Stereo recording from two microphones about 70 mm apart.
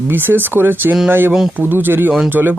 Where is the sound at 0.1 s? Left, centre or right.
Right.